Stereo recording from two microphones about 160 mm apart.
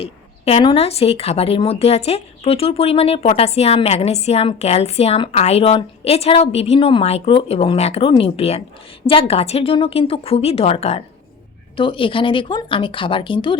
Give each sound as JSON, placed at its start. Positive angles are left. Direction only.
{"t": 0.0, "sound": "a woman's voice", "side_deg": 35}